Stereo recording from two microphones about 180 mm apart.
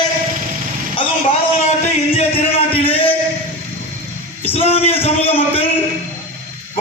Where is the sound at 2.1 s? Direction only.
30° left (ahead or behind).